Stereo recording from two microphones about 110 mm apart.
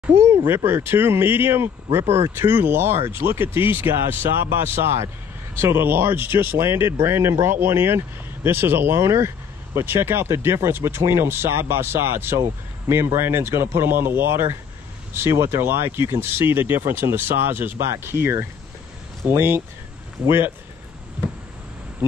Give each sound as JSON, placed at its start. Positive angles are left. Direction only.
{"t": 0.7, "sound": "speech", "side_deg": -20}